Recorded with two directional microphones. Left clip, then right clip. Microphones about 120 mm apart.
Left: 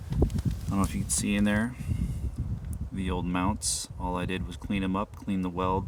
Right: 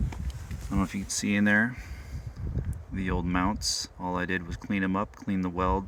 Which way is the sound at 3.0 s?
15° left (ahead or behind).